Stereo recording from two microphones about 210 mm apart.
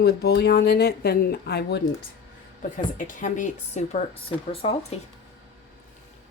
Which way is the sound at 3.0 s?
40° left (ahead or behind).